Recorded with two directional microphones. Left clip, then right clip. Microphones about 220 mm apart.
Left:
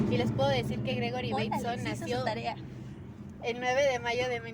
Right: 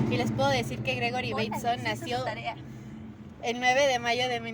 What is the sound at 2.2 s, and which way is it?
Speech, 20° left (ahead or behind).